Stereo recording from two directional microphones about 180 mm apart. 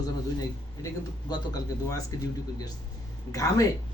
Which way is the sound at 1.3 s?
20° left (ahead or behind).